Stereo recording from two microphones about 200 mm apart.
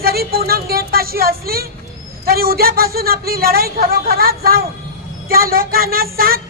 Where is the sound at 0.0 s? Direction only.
50° right (ahead or behind).